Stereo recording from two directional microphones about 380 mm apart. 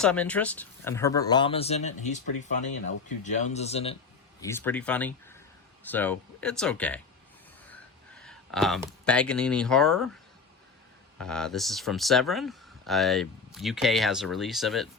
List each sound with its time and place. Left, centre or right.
0.0 s speech: centre
7.7 s a sound: centre
11.2 s speech: centre